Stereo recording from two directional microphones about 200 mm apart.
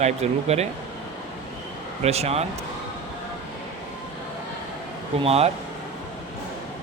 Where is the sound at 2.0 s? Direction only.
30° right (ahead or behind).